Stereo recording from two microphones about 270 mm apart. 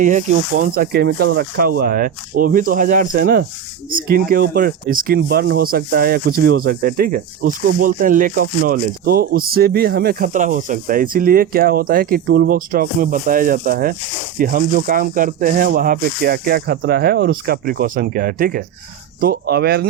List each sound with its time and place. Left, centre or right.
0.0 s speech: right